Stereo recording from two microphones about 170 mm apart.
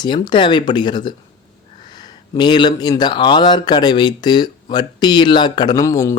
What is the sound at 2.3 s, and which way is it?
Speech, 25° left (ahead or behind).